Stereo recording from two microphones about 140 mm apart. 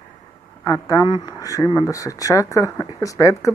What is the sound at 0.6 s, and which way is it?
Speech, 25° left (ahead or behind).